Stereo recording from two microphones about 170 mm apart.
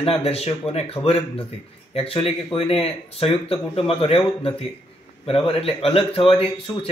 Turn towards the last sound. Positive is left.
turn(degrees=30)  # may be behind; listen again after turning